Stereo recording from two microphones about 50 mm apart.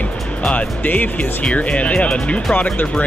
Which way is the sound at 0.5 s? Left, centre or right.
Left.